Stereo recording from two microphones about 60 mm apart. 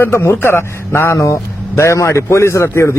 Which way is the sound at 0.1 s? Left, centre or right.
Left.